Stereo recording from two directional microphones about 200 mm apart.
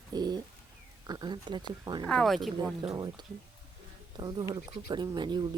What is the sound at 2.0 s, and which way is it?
Speech, centre (ahead or behind).